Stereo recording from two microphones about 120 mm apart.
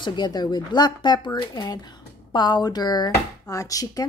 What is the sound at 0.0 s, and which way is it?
Speech, 40° left (ahead or behind).